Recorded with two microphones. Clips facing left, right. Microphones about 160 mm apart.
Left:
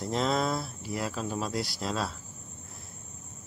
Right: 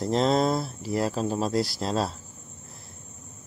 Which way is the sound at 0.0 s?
35° right (ahead or behind).